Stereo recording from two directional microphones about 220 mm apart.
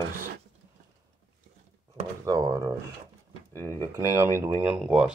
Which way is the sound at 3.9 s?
10° right (ahead or behind).